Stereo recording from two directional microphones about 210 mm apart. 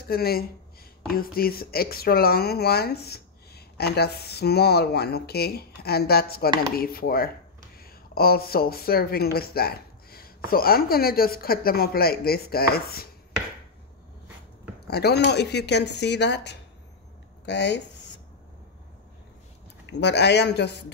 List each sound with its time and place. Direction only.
0.1 s speech: 45° left (ahead or behind)
14.9 s speech: 50° left (ahead or behind)
19.9 s speech: 55° left (ahead or behind)